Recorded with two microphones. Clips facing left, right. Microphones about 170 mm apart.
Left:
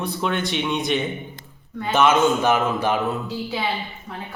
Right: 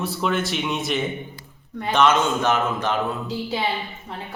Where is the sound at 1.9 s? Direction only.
10° left (ahead or behind).